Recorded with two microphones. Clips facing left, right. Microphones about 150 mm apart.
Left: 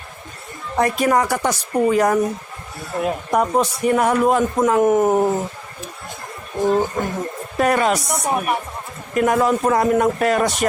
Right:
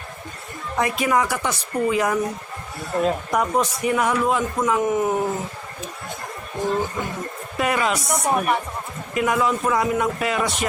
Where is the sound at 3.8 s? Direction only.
45° left (ahead or behind).